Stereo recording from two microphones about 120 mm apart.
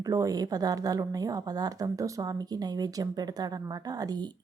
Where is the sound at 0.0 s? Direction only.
30° right (ahead or behind).